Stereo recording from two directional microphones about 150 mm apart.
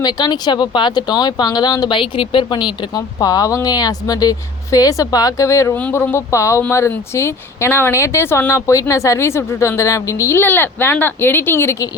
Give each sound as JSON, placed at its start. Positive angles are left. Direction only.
{"t": 0.0, "sound": "speech", "side_deg": 30}